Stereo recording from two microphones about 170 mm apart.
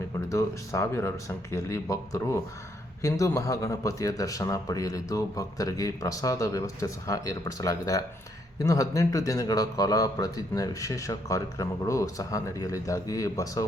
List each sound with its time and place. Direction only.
0.3 s a man's voice: 20° left (ahead or behind)